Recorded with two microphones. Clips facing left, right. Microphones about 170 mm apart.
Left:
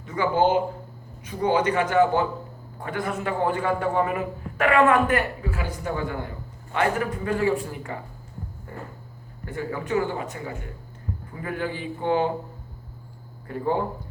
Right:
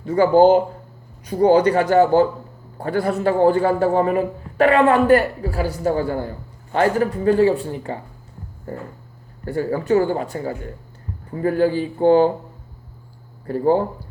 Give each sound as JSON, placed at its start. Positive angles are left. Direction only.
{"t": 0.0, "sound": "a man's voice", "side_deg": -35}
{"t": 13.5, "sound": "a man's voice", "side_deg": -35}